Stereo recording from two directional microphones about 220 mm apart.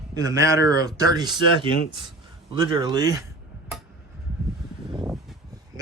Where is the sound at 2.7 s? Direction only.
20° right (ahead or behind).